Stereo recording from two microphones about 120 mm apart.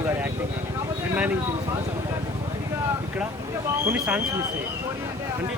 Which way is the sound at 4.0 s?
10° right (ahead or behind).